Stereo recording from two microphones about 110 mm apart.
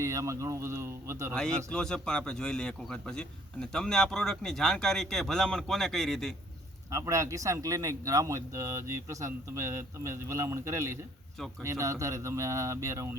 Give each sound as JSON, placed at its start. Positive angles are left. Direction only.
{"t": 0.0, "sound": "speech", "side_deg": -30}
{"t": 1.3, "sound": "a man's voice", "side_deg": 5}
{"t": 6.9, "sound": "speech", "side_deg": -30}